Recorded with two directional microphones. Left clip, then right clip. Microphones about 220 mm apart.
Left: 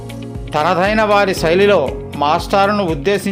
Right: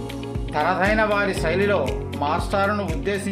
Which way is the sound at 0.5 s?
50° left (ahead or behind).